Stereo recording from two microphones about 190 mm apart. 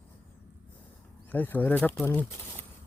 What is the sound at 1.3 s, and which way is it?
Speech, 10° left (ahead or behind).